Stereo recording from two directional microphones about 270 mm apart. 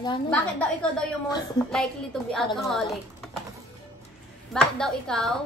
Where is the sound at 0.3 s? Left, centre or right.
Centre.